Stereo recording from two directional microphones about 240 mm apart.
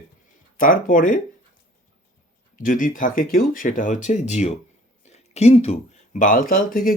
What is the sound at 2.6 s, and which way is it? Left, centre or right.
Speech, left.